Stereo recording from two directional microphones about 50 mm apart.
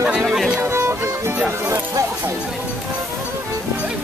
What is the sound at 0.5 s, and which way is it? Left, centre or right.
Music, right.